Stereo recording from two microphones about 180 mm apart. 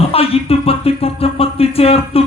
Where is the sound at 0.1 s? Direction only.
30° left (ahead or behind).